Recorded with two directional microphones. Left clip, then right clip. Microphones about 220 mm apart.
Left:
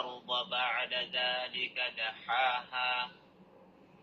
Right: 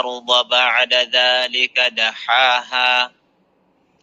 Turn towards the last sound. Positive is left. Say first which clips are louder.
# right 17 dB
turn(degrees=-50)  # may be behind; listen again after turning